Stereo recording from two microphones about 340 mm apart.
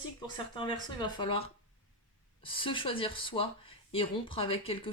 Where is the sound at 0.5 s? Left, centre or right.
Centre.